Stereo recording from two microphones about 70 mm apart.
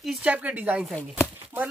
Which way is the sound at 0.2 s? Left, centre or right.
Centre.